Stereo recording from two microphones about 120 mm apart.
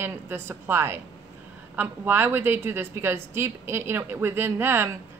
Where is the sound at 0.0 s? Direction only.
20° right (ahead or behind).